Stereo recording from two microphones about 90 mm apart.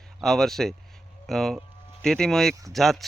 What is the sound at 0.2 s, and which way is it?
Speech, 5° left (ahead or behind).